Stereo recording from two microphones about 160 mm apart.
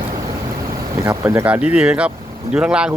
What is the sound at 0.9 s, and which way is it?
A man's voice, 20° right (ahead or behind).